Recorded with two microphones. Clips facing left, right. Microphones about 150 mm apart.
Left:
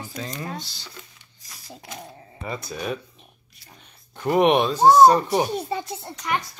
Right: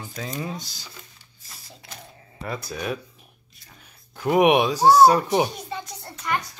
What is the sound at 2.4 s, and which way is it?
Speech, centre (ahead or behind).